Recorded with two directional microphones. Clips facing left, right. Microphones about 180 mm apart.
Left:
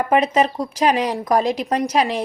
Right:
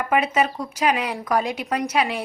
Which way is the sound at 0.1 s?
35° left (ahead or behind).